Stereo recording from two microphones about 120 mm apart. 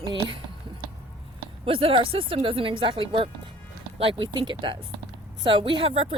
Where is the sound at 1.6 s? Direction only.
50° right (ahead or behind).